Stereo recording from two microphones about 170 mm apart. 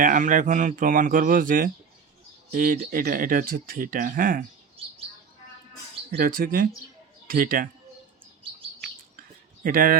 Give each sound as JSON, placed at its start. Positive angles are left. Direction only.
{"t": 0.0, "sound": "speech", "side_deg": -50}
{"t": 6.1, "sound": "speech", "side_deg": -55}
{"t": 9.6, "sound": "speech", "side_deg": -55}